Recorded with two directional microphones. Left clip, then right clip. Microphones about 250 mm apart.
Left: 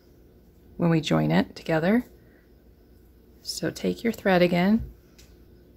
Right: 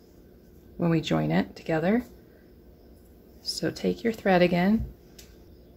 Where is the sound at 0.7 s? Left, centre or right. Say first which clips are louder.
Left 2 dB; centre.